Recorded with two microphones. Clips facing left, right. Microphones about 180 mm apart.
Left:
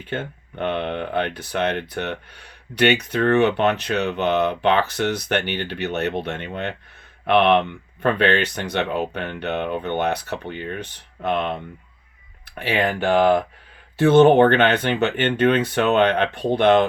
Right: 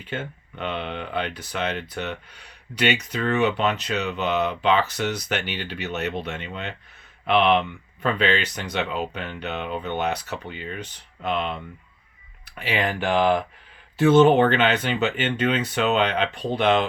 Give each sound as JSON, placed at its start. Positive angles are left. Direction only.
{"t": 0.1, "sound": "speech", "side_deg": 55}